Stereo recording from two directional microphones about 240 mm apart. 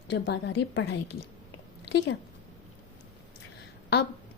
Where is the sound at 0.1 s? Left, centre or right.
Left.